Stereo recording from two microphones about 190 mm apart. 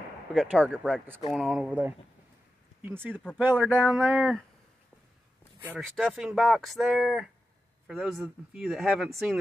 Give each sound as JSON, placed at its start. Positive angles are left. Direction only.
{"t": 0.3, "sound": "speech", "side_deg": 0}
{"t": 5.6, "sound": "speech", "side_deg": -5}